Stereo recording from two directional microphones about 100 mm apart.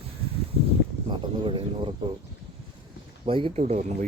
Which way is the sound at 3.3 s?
65° right (ahead or behind).